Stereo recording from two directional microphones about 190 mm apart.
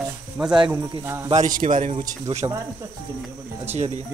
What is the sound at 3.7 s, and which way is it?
Speech, 35° right (ahead or behind).